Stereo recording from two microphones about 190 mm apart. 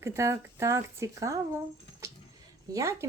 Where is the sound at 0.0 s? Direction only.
15° right (ahead or behind).